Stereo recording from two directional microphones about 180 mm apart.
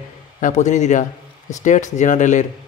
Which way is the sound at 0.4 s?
40° left (ahead or behind).